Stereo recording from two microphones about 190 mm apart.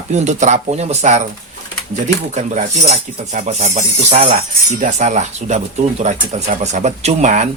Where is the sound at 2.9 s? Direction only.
40° right (ahead or behind).